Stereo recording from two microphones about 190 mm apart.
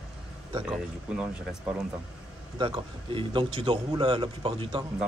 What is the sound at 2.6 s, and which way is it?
A man's voice, 25° right (ahead or behind).